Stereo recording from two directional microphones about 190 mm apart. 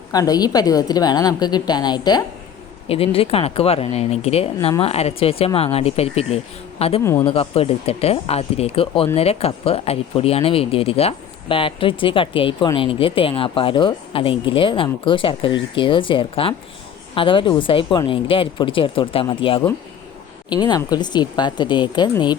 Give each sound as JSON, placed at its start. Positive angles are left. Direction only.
{"t": 0.1, "sound": "speech", "side_deg": 20}
{"t": 7.0, "sound": "speech", "side_deg": 15}
{"t": 7.3, "sound": "speech", "side_deg": 30}